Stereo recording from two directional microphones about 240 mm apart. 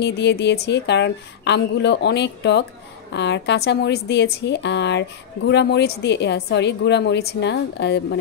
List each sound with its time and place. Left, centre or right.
0.0 s a woman's voice: left